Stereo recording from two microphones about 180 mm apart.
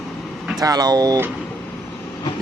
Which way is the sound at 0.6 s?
20° right (ahead or behind).